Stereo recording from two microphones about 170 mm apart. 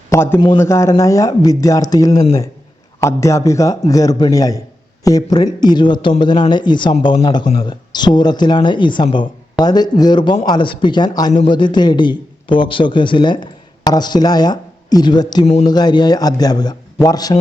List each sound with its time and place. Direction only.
0.1 s a man's voice: 15° left (ahead or behind)